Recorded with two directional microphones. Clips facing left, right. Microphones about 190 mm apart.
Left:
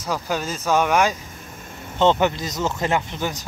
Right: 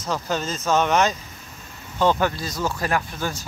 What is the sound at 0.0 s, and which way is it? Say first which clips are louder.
Speech: left 1 dB; 10° left (ahead or behind).